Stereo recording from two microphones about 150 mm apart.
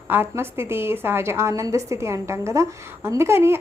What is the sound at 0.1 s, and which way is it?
A woman's voice, 15° right (ahead or behind).